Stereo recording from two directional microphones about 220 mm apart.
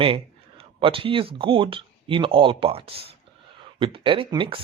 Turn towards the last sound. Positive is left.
turn(degrees=-25)  # may be behind; listen again after turning